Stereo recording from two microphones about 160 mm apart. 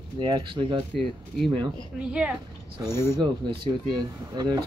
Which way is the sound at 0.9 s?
Centre (ahead or behind).